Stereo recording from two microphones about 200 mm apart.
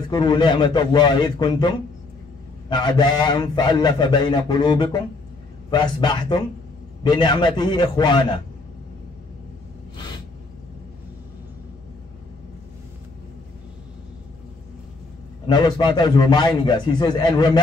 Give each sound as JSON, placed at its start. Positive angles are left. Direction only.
{"t": 0.1, "sound": "a man's voice", "side_deg": 20}
{"t": 15.4, "sound": "a man's voice", "side_deg": 20}